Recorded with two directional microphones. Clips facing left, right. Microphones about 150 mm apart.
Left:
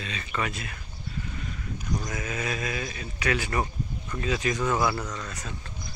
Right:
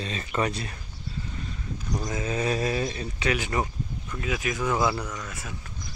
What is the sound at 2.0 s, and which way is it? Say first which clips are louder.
Speech: right 7 dB; 25° right (ahead or behind).